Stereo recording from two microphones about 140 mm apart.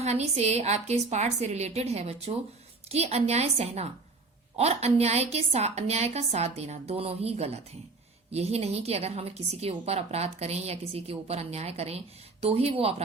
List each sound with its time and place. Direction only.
0.0 s a woman's voice: 50° right (ahead or behind)